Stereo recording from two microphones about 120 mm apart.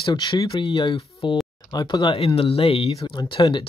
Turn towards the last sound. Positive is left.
turn(degrees=40)  # may be behind; listen again after turning